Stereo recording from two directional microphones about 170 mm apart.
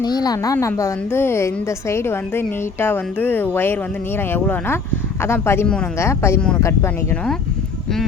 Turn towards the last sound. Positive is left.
turn(degrees=15)  # may be behind; listen again after turning